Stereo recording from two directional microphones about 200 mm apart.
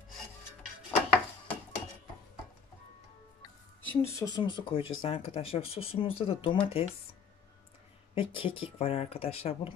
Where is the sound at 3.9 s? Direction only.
15° left (ahead or behind).